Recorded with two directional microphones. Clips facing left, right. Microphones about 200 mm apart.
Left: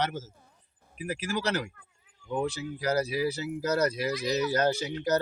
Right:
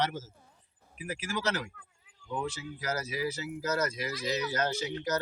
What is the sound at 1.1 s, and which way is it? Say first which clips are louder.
Speech: left 3 dB; 35° left (ahead or behind).